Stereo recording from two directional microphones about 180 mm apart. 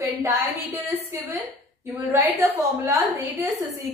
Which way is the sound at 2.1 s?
15° right (ahead or behind).